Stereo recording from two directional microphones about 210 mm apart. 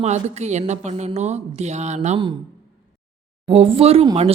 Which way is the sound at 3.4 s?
25° right (ahead or behind).